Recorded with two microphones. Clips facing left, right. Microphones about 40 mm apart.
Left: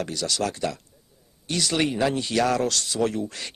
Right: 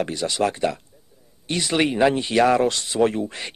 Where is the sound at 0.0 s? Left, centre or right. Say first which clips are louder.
Right 4 dB; right.